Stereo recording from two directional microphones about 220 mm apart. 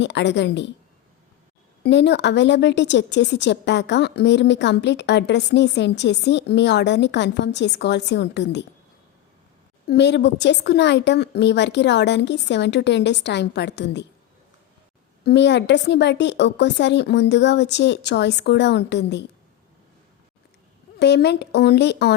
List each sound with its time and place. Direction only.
0.0 s a woman's voice: 55° left (ahead or behind)
1.8 s a woman's voice: 50° left (ahead or behind)
9.8 s a woman's voice: 50° left (ahead or behind)
15.2 s a woman's voice: 50° left (ahead or behind)
21.0 s a woman's voice: 50° left (ahead or behind)